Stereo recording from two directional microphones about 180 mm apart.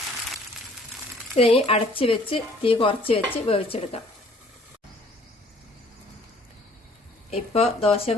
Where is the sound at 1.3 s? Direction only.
30° left (ahead or behind).